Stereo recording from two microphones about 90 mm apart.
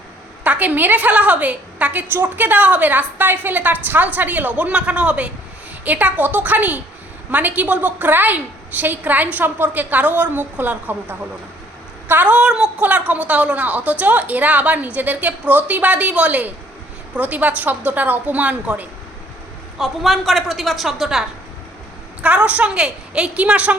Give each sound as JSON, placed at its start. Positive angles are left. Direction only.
{"t": 0.4, "sound": "a woman's voice", "side_deg": -15}
{"t": 19.8, "sound": "a woman's voice", "side_deg": 0}
{"t": 22.2, "sound": "a woman's voice", "side_deg": -15}